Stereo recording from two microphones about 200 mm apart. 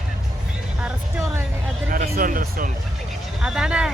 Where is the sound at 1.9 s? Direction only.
45° right (ahead or behind).